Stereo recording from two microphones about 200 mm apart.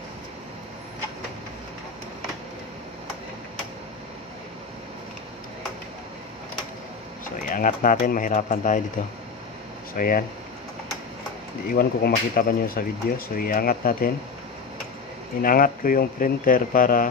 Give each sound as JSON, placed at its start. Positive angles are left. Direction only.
{"t": 7.4, "sound": "speech", "side_deg": 40}
{"t": 9.9, "sound": "speech", "side_deg": 45}
{"t": 11.7, "sound": "speech", "side_deg": 50}
{"t": 15.4, "sound": "speech", "side_deg": 45}